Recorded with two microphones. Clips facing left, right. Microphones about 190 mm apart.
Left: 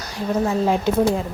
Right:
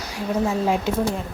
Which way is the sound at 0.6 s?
5° right (ahead or behind).